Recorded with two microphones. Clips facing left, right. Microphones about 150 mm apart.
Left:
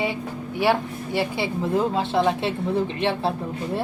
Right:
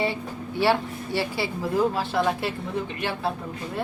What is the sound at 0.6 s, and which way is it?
Speech, 20° left (ahead or behind).